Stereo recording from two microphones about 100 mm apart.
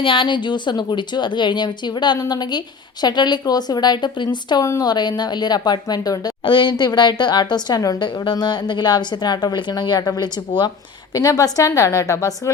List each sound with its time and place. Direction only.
0.0 s speech: 55° left (ahead or behind)
4.6 s speech: 35° left (ahead or behind)
6.4 s speech: 55° left (ahead or behind)
8.0 s a woman's voice: 50° left (ahead or behind); by 12.5 s 30° left (ahead or behind)